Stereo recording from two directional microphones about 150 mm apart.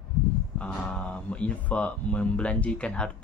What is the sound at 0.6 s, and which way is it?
Speech, 5° left (ahead or behind).